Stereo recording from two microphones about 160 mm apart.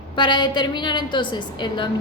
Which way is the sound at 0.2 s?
30° left (ahead or behind).